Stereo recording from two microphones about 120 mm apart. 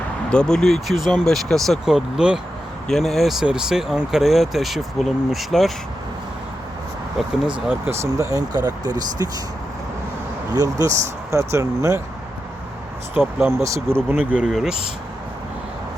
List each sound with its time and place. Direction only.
0.3 s speech: 5° left (ahead or behind)
7.9 s speech: 25° right (ahead or behind)
10.5 s speech: 30° right (ahead or behind)
13.1 s speech: 20° right (ahead or behind)
14.3 s speech: 5° right (ahead or behind)